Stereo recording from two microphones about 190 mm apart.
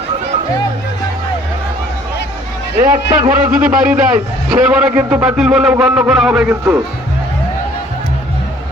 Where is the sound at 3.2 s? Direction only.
10° right (ahead or behind).